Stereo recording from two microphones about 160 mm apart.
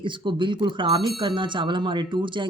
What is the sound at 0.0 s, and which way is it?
Speech, 30° right (ahead or behind).